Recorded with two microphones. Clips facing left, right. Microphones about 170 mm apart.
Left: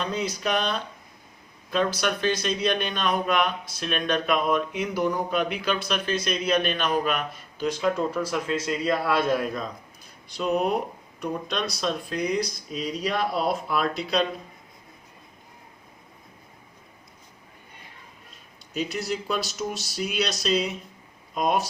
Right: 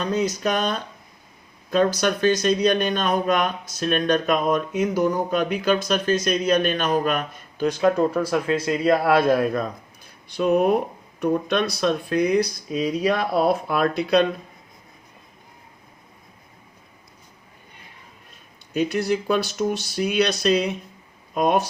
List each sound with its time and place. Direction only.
0.0 s speech: 45° right (ahead or behind)
18.7 s speech: 55° right (ahead or behind)